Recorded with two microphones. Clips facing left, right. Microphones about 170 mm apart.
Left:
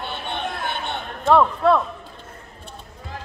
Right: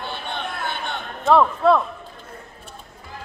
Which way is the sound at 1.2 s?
Centre (ahead or behind).